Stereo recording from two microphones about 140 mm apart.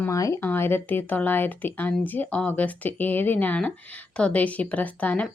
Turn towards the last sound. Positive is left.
turn(degrees=10)  # may be behind; listen again after turning